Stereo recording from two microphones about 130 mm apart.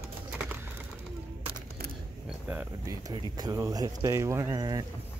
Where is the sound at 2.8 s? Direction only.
30° right (ahead or behind).